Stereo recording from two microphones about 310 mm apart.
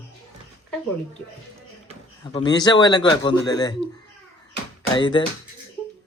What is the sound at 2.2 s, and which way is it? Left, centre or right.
Speech, centre.